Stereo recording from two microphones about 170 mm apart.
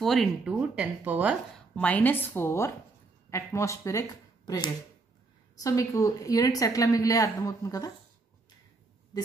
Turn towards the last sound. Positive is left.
turn(degrees=20)  # may be behind; listen again after turning